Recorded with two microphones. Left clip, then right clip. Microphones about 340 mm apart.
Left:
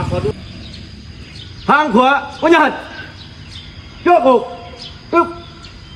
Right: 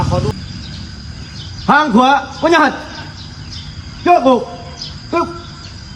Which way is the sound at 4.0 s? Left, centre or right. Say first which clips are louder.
Even; centre.